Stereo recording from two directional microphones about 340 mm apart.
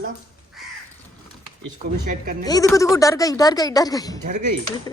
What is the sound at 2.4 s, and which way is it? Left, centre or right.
Speech, centre.